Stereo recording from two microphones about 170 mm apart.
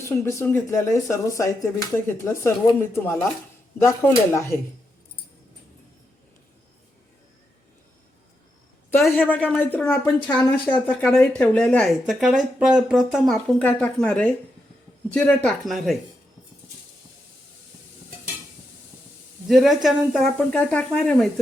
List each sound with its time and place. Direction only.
0.0 s speech: 15° left (ahead or behind)
9.1 s speech: 10° left (ahead or behind)
19.5 s speech: centre (ahead or behind)